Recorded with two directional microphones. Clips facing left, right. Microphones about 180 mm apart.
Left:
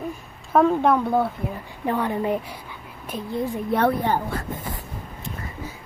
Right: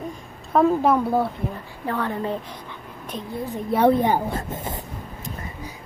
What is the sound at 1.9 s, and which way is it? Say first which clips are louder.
A woman's voice: left 3 dB; 15° left (ahead or behind).